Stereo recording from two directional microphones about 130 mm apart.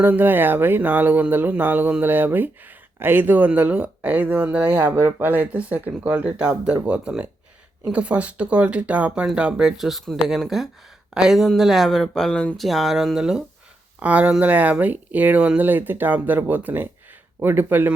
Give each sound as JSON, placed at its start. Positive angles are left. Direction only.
{"t": 0.0, "sound": "speech", "side_deg": -15}